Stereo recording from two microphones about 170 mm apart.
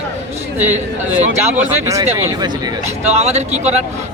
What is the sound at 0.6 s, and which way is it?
Speech, 10° right (ahead or behind).